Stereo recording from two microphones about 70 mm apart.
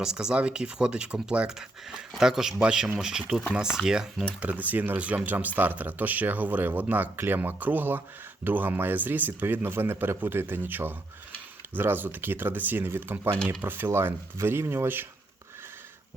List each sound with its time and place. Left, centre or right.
0.0 s speech: centre
4.4 s a man's voice: right